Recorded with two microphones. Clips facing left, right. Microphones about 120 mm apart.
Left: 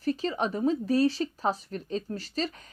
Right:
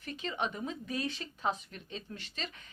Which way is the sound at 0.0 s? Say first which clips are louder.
Left 8 dB; 35° left (ahead or behind).